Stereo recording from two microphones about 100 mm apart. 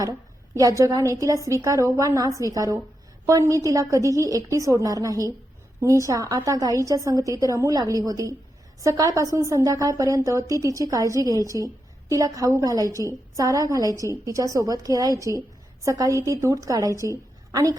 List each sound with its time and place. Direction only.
0.8 s a woman's voice: 35° right (ahead or behind)